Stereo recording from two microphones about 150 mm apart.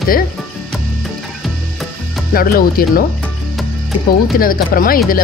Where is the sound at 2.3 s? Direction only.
80° left.